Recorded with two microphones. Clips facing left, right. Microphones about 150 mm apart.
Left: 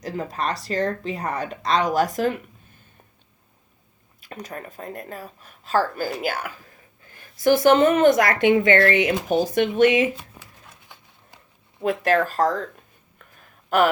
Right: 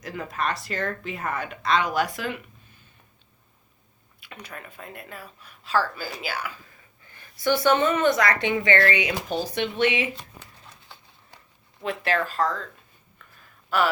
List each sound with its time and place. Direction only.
0.0 s speech: 35° left (ahead or behind)
4.2 s speech: 40° left (ahead or behind)
10.2 s a sound: 10° left (ahead or behind)
11.8 s speech: 45° left (ahead or behind)
13.7 s a man's voice: 50° left (ahead or behind)